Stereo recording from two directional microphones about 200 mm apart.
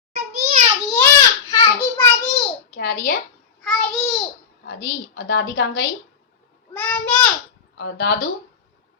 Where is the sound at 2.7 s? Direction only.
45° left (ahead or behind).